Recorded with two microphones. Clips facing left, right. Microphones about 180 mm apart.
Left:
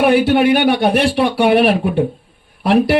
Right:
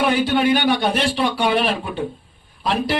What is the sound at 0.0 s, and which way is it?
Speech, 60° left (ahead or behind).